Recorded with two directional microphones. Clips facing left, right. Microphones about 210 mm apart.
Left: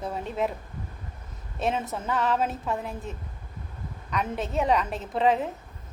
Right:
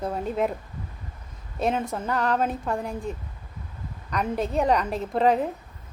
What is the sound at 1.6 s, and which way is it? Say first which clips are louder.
A man's voice: right 3 dB; centre (ahead or behind).